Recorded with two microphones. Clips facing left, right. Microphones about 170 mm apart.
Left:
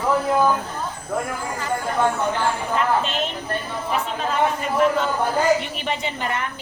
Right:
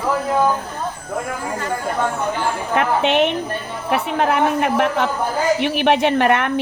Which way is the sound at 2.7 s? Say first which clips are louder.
Right 8 dB; 70° right (ahead or behind).